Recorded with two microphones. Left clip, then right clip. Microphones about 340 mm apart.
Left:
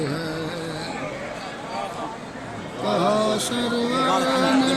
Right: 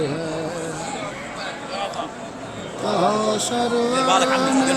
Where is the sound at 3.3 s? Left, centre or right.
Centre.